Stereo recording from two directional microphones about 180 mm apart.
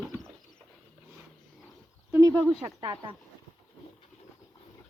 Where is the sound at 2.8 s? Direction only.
25° right (ahead or behind).